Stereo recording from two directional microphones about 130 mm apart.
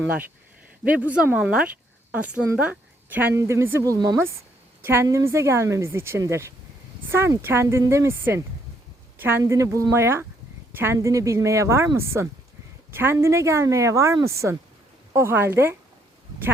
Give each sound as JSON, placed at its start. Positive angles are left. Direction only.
{"t": 0.9, "sound": "a woman's voice", "side_deg": -10}